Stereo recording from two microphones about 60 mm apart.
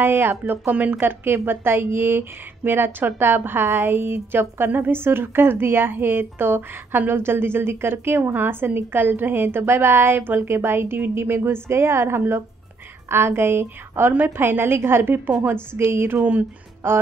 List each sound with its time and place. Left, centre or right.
0.0 s a woman's voice: right